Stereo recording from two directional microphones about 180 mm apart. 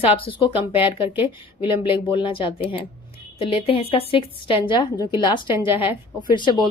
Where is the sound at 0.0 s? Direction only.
30° left (ahead or behind).